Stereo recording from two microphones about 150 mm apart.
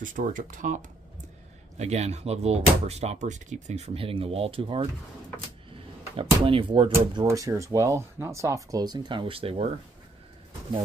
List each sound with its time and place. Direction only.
0.0 s speech: 60° right (ahead or behind)
1.8 s speech: 45° right (ahead or behind)
6.1 s speech: 35° right (ahead or behind)
7.2 s speech: 20° right (ahead or behind); by 9.7 s 40° right (ahead or behind)